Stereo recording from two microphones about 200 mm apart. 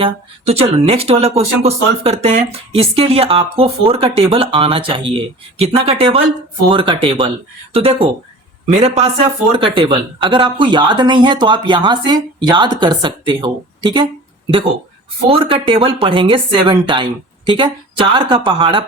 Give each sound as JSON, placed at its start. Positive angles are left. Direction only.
{"t": 0.0, "sound": "a man's voice", "side_deg": -30}